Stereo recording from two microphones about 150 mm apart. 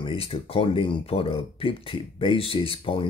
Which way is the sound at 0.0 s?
40° left (ahead or behind).